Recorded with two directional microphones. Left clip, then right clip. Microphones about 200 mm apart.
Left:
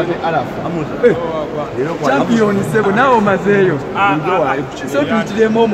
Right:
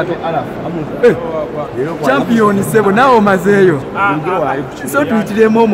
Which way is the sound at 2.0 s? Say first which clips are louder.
Right 3 dB; 40° right (ahead or behind).